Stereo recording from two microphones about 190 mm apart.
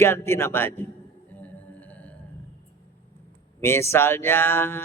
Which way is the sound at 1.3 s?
10° left (ahead or behind).